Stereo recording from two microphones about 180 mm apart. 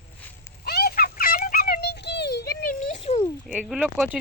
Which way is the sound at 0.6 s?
60° left (ahead or behind).